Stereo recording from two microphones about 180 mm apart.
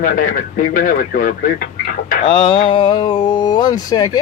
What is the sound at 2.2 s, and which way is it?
Speech, 30° left (ahead or behind).